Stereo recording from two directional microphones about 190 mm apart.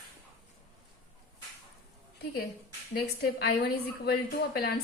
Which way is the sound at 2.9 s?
55° left (ahead or behind).